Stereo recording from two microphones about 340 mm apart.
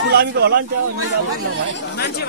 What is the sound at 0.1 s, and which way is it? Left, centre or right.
Speech, right.